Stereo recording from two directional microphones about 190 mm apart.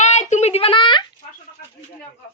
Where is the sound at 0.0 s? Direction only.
35° left (ahead or behind).